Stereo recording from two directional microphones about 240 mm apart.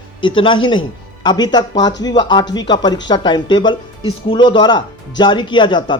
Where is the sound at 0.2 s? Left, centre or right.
Left.